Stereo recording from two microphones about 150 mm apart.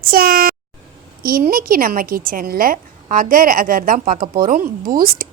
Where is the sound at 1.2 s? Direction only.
75° right (ahead or behind).